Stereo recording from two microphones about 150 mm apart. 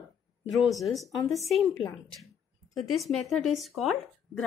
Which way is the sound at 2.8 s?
Centre (ahead or behind).